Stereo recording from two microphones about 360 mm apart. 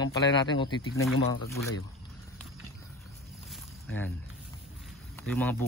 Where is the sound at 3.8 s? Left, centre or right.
Centre.